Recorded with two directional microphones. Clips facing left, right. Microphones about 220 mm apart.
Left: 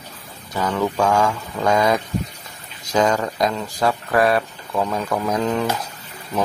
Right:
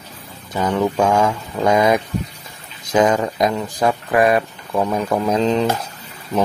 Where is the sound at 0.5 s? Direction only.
20° right (ahead or behind).